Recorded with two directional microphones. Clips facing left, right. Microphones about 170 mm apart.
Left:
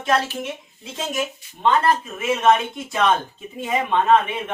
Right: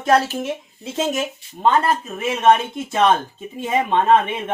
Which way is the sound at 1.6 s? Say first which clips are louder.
Right 1 dB; 40° right (ahead or behind).